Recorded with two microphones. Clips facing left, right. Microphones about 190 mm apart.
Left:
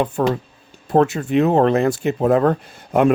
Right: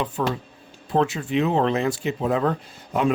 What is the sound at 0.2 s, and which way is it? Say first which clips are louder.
Speech: left 6 dB; 50° left (ahead or behind).